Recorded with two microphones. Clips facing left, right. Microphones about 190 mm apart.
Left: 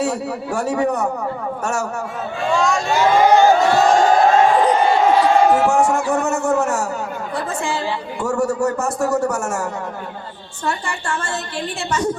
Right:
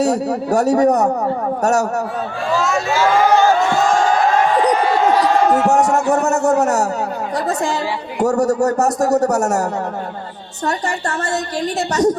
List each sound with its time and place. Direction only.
0.0 s a man's voice: 40° right (ahead or behind)
2.6 s speech: 5° right (ahead or behind)
2.9 s speech: 15° left (ahead or behind)
4.7 s a sound: 25° left (ahead or behind)
5.6 s a man's voice: 40° right (ahead or behind)
10.7 s a man's voice: 40° right (ahead or behind)